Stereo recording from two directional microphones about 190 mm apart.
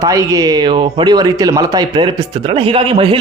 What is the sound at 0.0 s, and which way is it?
A man's voice, 15° right (ahead or behind).